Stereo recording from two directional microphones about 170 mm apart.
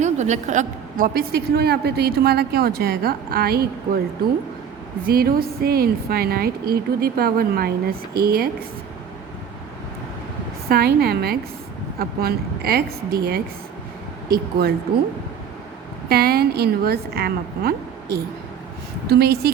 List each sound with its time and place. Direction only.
0.0 s a woman's voice: 45° right (ahead or behind); by 4.0 s 65° right (ahead or behind)
5.0 s a woman's voice: 60° right (ahead or behind)
10.7 s a woman's voice: 65° right (ahead or behind)
16.0 s a woman's voice: 65° right (ahead or behind)